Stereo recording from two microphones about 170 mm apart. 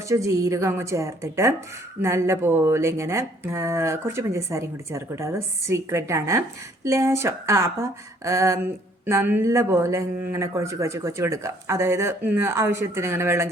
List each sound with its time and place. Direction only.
0.1 s speech: 20° right (ahead or behind)